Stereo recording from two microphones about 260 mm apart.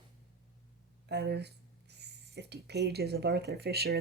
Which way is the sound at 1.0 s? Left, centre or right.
Right.